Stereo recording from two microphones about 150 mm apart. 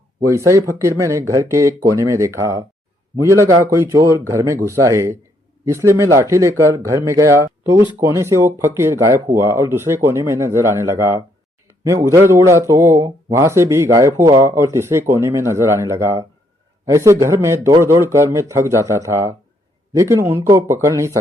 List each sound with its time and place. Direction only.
0.2 s speech: 20° right (ahead or behind)